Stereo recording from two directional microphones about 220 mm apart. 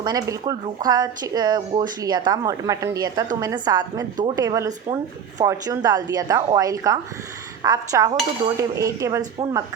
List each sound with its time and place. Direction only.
0.0 s speech: 15° right (ahead or behind)